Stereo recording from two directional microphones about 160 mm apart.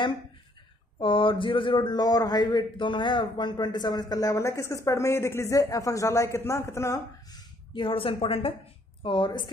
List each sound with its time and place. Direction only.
0.9 s a man's voice: 30° left (ahead or behind)
7.7 s a woman's voice: 35° left (ahead or behind)